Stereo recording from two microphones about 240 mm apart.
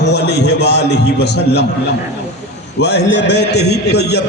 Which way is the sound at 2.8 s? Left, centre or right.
Left.